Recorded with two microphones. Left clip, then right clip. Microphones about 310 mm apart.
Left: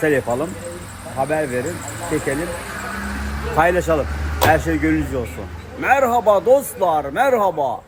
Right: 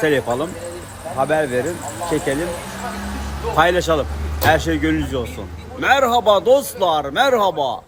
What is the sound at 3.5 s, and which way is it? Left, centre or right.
Speech, centre.